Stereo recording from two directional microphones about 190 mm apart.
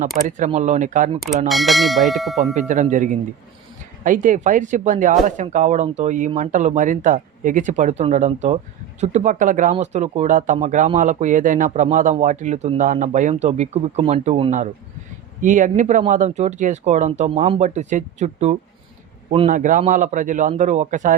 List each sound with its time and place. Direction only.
0.3 s speech: 40° right (ahead or behind)
1.5 s bell: centre (ahead or behind)
2.6 s speech: 40° right (ahead or behind)